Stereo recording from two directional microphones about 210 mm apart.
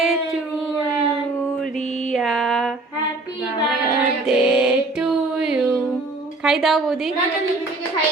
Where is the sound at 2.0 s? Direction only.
Centre (ahead or behind).